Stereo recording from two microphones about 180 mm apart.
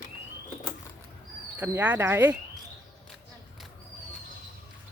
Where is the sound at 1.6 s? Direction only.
10° right (ahead or behind).